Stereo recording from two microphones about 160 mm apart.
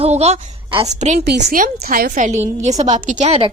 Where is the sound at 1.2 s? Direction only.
90° right.